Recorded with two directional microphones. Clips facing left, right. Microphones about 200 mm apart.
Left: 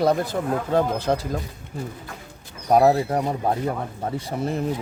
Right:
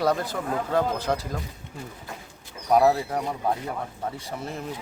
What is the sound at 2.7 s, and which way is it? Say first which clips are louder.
Speech: left 3 dB; 30° left (ahead or behind).